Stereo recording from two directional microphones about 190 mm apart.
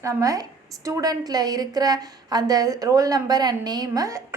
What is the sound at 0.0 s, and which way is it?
A woman's voice, 15° right (ahead or behind).